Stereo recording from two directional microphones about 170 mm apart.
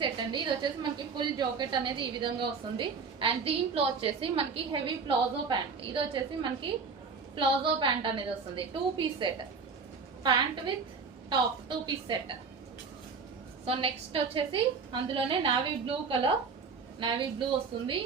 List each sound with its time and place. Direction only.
0.0 s a woman's voice: 25° right (ahead or behind)
13.7 s a woman's voice: 30° right (ahead or behind)